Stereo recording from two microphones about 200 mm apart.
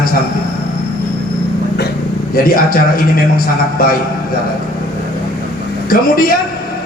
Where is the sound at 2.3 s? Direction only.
45° left (ahead or behind).